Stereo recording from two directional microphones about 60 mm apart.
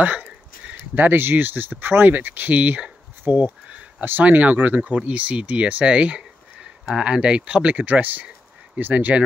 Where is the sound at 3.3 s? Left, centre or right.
Centre.